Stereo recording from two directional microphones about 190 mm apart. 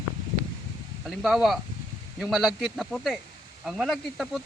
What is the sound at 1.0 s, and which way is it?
Speech, centre (ahead or behind).